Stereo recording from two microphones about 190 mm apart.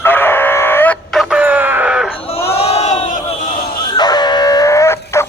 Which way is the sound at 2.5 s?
35° left (ahead or behind).